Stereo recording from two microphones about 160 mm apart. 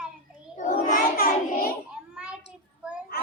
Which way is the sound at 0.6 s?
55° left (ahead or behind).